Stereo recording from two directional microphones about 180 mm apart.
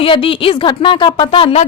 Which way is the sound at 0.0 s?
30° left (ahead or behind).